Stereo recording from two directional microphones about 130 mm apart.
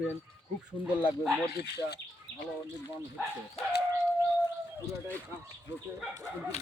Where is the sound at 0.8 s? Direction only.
40° left (ahead or behind).